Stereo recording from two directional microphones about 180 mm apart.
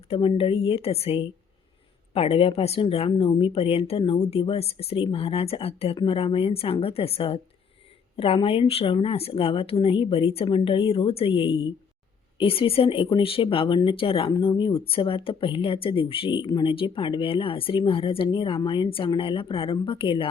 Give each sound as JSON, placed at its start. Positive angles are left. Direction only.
{"t": 0.1, "sound": "speech", "side_deg": 30}